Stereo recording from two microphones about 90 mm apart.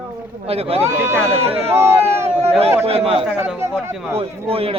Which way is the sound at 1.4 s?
90° right.